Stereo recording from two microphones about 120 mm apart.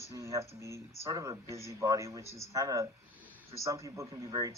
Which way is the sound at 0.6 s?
25° right (ahead or behind).